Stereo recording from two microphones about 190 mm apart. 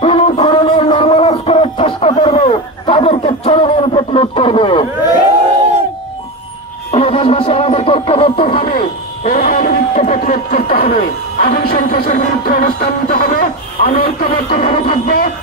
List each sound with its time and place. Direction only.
0.0 s a sound: 30° left (ahead or behind)
6.9 s music: 30° left (ahead or behind)
8.6 s speech: 50° left (ahead or behind)